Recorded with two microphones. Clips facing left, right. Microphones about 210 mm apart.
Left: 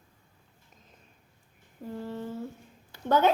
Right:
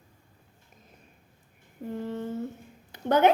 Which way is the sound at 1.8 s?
20° right (ahead or behind).